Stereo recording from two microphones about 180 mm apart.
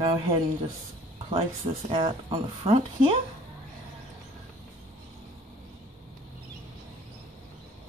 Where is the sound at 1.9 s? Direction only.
30° right (ahead or behind).